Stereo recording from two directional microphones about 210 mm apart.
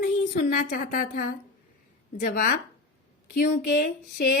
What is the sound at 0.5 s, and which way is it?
Speech, 45° left (ahead or behind).